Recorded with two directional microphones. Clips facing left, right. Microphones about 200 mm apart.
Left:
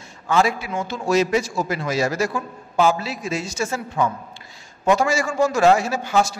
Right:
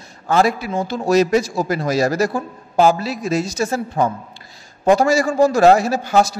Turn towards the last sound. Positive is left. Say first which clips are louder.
# right 4 dB
turn(degrees=-40)  # may be behind; listen again after turning